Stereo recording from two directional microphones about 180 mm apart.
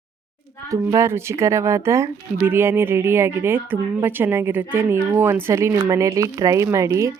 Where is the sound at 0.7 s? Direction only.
15° right (ahead or behind).